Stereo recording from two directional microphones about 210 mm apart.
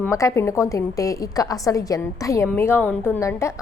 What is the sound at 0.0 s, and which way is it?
A woman's voice, 15° left (ahead or behind).